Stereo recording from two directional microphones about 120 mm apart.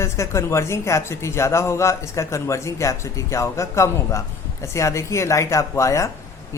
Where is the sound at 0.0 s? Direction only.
25° left (ahead or behind).